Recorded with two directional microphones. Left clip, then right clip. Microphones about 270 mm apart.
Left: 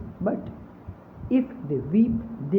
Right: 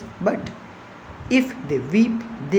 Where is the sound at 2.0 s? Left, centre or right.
Centre.